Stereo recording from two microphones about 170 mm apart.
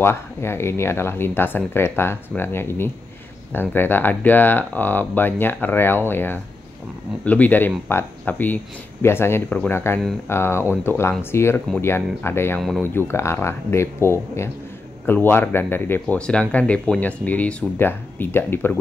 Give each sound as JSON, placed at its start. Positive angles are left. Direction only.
{"t": 0.0, "sound": "speech", "side_deg": 15}
{"t": 12.5, "sound": "speech", "side_deg": 0}
{"t": 12.8, "sound": "speech", "side_deg": 15}